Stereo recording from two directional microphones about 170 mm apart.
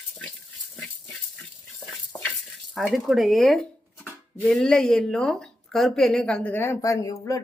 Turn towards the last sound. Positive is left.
turn(degrees=20)  # may be behind; listen again after turning